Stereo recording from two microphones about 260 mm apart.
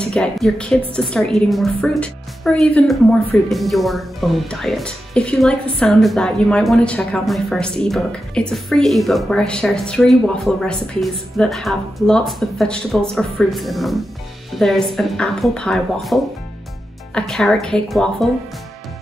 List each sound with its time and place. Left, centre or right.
0.0 s a woman's voice: centre